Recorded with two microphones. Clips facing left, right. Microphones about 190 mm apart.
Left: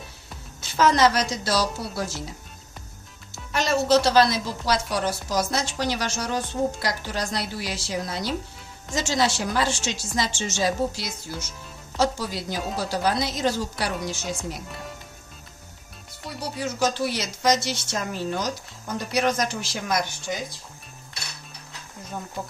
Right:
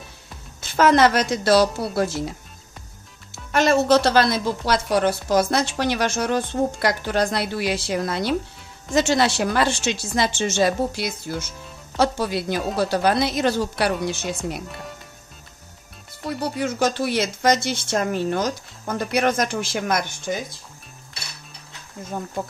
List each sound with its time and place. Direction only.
0.6 s speech: 55° right (ahead or behind)
3.5 s speech: 55° right (ahead or behind)
16.4 s speech: 55° right (ahead or behind)